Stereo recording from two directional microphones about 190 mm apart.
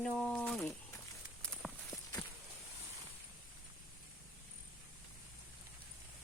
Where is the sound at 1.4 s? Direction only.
5° left (ahead or behind).